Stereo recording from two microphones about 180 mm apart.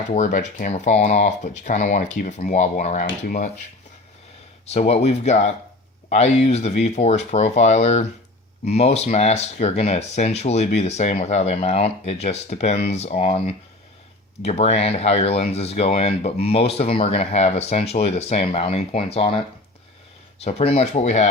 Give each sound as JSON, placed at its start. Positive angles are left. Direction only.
{"t": 0.1, "sound": "speech", "side_deg": 45}
{"t": 4.7, "sound": "speech", "side_deg": 35}
{"t": 14.4, "sound": "speech", "side_deg": 35}